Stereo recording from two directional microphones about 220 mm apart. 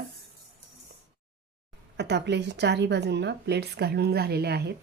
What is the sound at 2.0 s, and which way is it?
A woman's voice, 50° right (ahead or behind).